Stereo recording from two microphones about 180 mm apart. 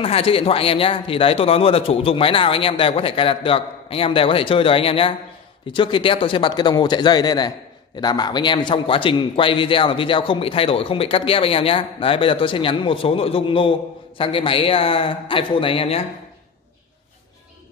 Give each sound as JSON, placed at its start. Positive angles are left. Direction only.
{"t": 0.0, "sound": "a man's voice", "side_deg": 30}